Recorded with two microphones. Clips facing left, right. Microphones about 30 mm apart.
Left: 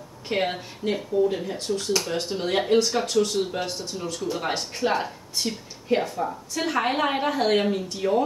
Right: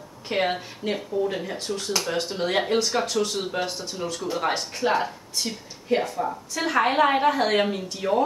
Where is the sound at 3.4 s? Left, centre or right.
Centre.